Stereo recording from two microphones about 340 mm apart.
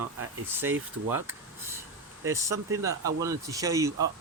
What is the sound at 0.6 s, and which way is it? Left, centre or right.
Speech, centre.